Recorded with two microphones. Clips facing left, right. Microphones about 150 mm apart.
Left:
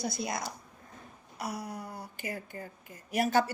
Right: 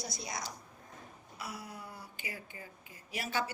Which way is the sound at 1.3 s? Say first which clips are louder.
Left 7 dB; 40° left (ahead or behind).